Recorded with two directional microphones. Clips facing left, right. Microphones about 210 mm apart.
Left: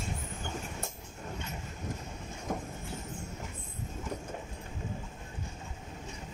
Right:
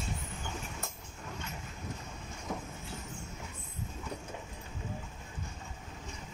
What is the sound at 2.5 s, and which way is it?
Train, 40° left (ahead or behind).